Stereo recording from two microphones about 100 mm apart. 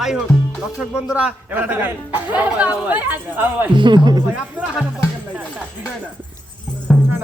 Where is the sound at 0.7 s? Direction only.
10° right (ahead or behind).